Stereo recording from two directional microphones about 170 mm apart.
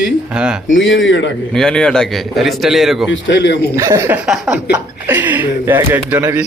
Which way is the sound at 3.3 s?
90° left.